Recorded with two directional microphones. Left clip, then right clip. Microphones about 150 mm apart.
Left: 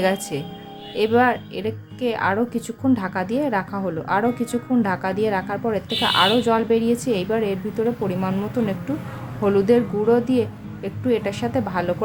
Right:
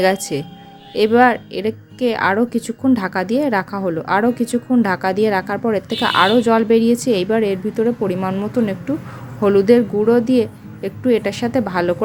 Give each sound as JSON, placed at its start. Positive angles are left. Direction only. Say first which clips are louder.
{"t": 0.0, "sound": "a woman's voice", "louder": "right 5 dB", "side_deg": -30}